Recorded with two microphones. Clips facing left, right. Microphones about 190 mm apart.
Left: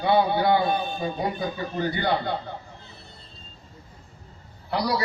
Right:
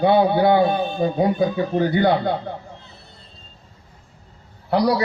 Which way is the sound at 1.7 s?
50° right (ahead or behind).